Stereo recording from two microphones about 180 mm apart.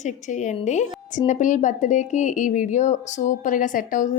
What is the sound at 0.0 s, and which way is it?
A woman's voice, 40° left (ahead or behind).